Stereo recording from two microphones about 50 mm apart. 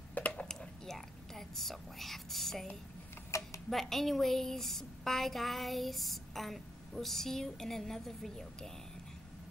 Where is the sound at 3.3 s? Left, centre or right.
Left.